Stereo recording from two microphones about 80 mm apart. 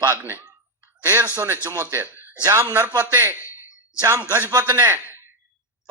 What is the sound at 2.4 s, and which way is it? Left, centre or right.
Speech, right.